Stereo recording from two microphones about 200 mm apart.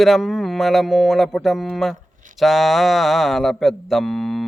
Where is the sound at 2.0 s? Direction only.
40° right (ahead or behind).